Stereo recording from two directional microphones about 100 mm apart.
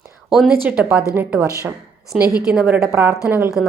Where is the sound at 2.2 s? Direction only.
40° left (ahead or behind).